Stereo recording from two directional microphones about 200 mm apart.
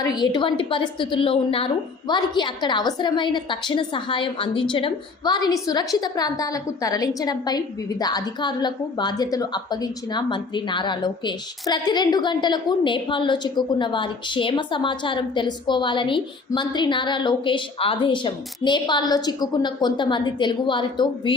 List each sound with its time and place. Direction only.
0.0 s a woman's voice: 20° left (ahead or behind)